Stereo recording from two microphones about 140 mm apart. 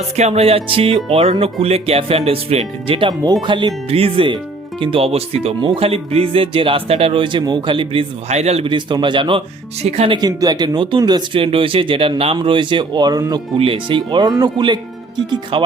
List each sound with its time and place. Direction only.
0.2 s speech: 50° right (ahead or behind)
8.3 s speech: 50° right (ahead or behind); by 9.4 s 35° right (ahead or behind)
9.8 s speech: 50° right (ahead or behind)
10.2 s speech: 30° right (ahead or behind)
13.6 s speech: 40° right (ahead or behind)